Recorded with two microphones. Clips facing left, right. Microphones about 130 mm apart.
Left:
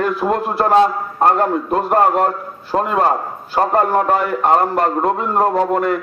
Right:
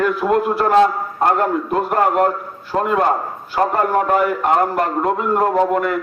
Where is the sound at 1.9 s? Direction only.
35° left (ahead or behind).